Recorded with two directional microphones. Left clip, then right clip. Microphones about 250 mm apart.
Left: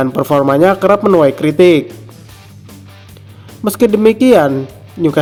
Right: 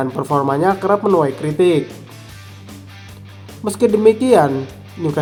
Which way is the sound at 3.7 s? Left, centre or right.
Left.